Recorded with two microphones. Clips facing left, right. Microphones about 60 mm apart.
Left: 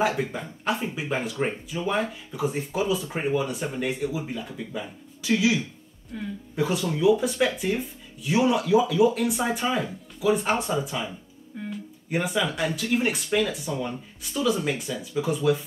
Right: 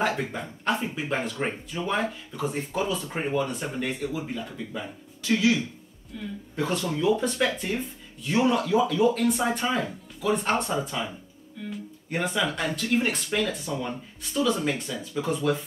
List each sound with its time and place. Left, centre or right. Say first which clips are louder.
0.0 s speech: left 2 dB; centre
6.1 s a woman's voice: left 2 dB; left
6.5 s speech: left 2 dB; centre